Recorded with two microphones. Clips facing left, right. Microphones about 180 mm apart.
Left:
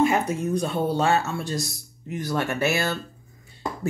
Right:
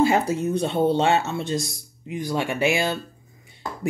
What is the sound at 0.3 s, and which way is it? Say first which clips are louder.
Speech: right 2 dB; 30° right (ahead or behind).